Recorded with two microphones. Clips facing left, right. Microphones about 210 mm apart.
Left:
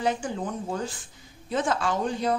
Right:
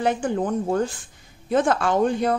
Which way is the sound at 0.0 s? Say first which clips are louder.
Right 5 dB; 55° right (ahead or behind).